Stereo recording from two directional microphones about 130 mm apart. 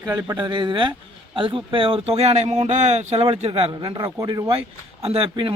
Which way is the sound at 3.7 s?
35° right (ahead or behind).